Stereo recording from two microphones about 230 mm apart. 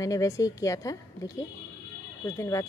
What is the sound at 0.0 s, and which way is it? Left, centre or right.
Speech, centre.